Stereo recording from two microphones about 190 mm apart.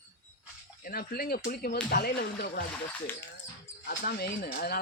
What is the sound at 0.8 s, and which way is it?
Speech, 50° left (ahead or behind).